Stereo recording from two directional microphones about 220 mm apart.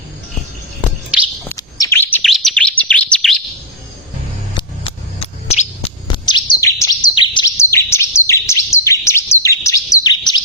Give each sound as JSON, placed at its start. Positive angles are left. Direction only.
{"t": 1.1, "sound": "bird", "side_deg": -5}
{"t": 1.5, "sound": "bird", "side_deg": 15}
{"t": 4.5, "sound": "bird", "side_deg": 25}